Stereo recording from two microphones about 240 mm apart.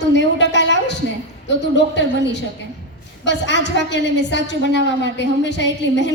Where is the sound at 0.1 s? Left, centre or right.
Left.